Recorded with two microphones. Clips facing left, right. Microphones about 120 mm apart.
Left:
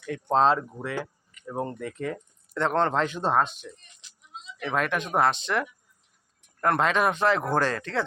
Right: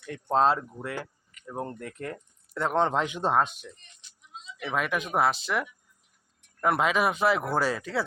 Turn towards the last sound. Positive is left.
turn(degrees=-5)  # may be behind; listen again after turning